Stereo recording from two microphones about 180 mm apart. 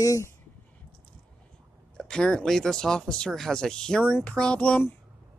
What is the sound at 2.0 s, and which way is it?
Speech, 5° left (ahead or behind).